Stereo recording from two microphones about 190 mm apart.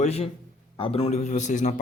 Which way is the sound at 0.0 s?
35° left (ahead or behind).